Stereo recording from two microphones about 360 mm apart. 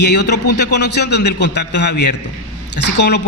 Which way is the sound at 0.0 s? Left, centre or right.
Left.